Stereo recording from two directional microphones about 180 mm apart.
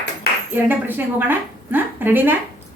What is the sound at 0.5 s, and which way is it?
A woman's voice, 10° right (ahead or behind).